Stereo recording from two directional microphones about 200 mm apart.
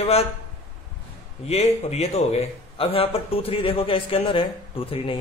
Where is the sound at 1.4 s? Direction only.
30° left (ahead or behind).